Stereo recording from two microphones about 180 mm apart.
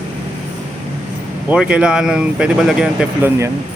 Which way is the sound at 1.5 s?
5° right (ahead or behind).